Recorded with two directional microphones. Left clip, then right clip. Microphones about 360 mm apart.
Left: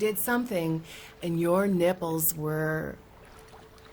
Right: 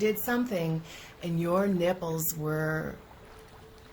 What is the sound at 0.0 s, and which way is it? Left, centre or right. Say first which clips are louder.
A woman's voice: left 1 dB; left.